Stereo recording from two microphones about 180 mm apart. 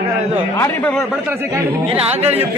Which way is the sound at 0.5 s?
15° left (ahead or behind).